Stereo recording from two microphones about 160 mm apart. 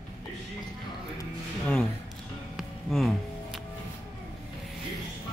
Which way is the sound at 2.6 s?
Centre (ahead or behind).